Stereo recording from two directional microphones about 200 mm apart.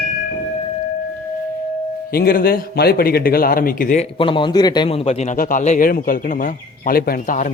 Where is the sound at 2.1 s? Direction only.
50° left (ahead or behind).